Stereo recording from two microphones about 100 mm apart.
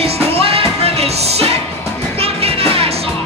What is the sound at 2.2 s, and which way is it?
Music, 80° right.